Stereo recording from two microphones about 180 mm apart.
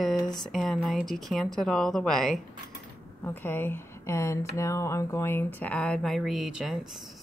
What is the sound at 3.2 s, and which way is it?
Speech, 10° left (ahead or behind).